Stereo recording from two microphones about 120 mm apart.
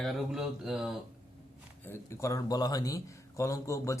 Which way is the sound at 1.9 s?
25° left (ahead or behind).